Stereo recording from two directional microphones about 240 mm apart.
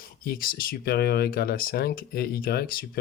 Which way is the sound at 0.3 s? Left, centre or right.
Left.